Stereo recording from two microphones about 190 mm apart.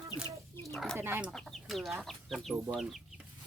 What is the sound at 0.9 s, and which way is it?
Speech, 10° right (ahead or behind).